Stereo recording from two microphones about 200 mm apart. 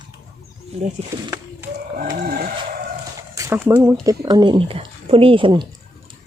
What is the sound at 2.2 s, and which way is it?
Vehicle, 45° right (ahead or behind).